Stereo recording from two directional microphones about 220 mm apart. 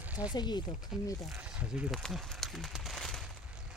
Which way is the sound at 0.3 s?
20° left (ahead or behind).